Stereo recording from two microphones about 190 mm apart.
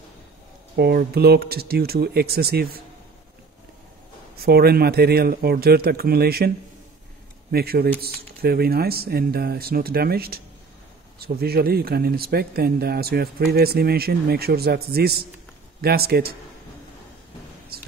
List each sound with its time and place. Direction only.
0.7 s speech: 55° right (ahead or behind)
4.4 s speech: 55° right (ahead or behind)
7.5 s speech: 55° right (ahead or behind)